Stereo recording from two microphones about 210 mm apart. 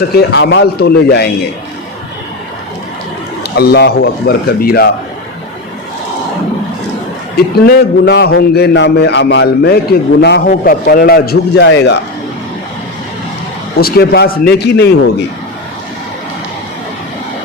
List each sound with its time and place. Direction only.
0.1 s a man's voice: 50° left (ahead or behind)
3.4 s a man's voice: 50° left (ahead or behind)
7.3 s a man's voice: 50° left (ahead or behind)
13.7 s a man's voice: 45° left (ahead or behind)